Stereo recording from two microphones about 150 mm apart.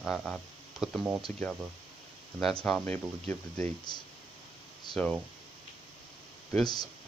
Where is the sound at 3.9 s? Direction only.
30° left (ahead or behind).